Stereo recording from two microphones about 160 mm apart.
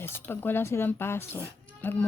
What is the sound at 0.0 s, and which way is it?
Speech, 15° left (ahead or behind).